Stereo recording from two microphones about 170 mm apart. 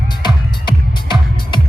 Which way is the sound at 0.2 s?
25° left (ahead or behind).